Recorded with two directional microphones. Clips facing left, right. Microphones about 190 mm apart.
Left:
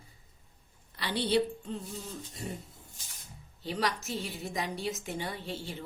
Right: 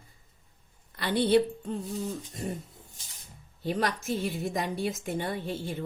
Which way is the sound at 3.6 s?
50° right (ahead or behind).